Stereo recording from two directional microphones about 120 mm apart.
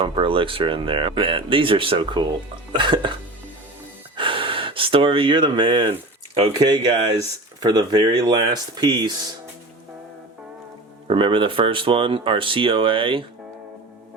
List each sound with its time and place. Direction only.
0.0 s speech: 45° right (ahead or behind)
4.1 s gasp: 45° right (ahead or behind)
6.7 s speech: 35° right (ahead or behind)
11.1 s speech: 45° right (ahead or behind)